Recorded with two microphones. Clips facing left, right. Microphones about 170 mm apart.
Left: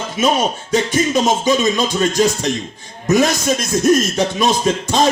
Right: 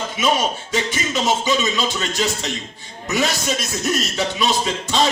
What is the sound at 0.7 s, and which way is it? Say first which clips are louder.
Speech: left 7 dB; 45° left (ahead or behind).